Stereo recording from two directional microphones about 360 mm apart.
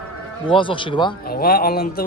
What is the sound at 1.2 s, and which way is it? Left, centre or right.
Speech, left.